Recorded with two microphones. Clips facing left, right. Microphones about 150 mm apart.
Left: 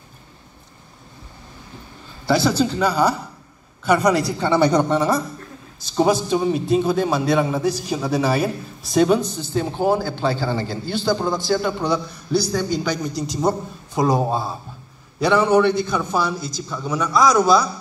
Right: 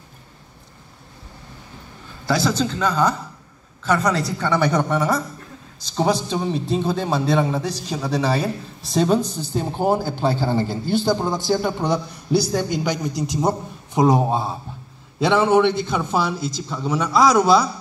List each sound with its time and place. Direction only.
2.2 s a man's voice: 5° left (ahead or behind)
6.3 s a man's voice: 15° left (ahead or behind)
9.5 s a man's voice: 5° right (ahead or behind); by 17.6 s 25° right (ahead or behind)